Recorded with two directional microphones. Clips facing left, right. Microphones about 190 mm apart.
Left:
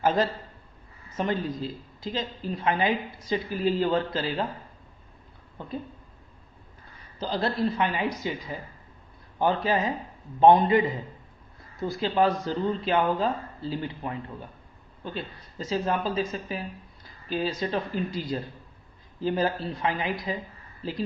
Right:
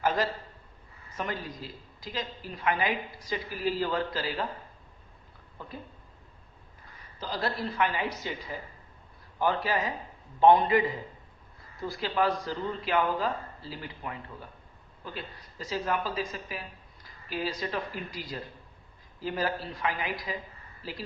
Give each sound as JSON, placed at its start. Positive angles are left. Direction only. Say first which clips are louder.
{"t": 1.1, "sound": "a woman's voice", "louder": "left 7 dB", "side_deg": 25}
{"t": 7.2, "sound": "a woman's voice", "louder": "left 6 dB", "side_deg": 25}